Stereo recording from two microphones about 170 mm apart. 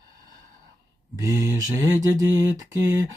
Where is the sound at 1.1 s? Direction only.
20° right (ahead or behind).